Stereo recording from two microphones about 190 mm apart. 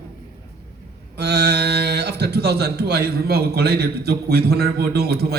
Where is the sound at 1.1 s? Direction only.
60° right (ahead or behind).